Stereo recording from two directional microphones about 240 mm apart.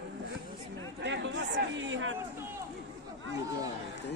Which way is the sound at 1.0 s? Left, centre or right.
Right.